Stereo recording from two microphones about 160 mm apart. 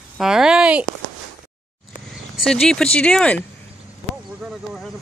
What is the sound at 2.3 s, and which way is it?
Speech, 5° left (ahead or behind).